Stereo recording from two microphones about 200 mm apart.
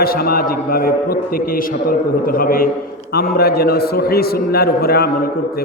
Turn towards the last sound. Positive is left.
turn(degrees=50)  # may be behind; listen again after turning